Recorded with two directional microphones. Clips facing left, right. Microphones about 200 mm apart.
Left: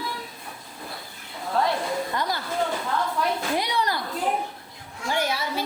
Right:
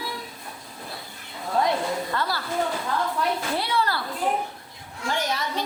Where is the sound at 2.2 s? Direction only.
20° left (ahead or behind).